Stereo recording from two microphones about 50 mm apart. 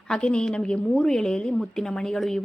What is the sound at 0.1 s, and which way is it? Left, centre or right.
A woman's voice, centre.